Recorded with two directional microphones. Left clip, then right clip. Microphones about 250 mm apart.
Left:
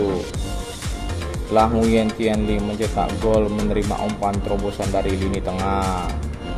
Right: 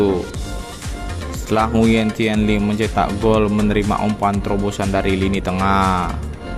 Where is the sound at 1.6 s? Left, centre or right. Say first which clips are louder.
Even; right.